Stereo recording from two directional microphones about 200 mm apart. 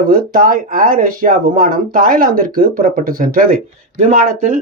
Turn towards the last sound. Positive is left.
turn(degrees=-40)  # may be behind; listen again after turning